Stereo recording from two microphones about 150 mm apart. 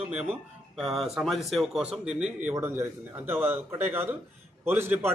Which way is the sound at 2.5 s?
15° right (ahead or behind).